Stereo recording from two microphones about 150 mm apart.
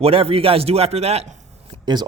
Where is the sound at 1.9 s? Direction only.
30° right (ahead or behind).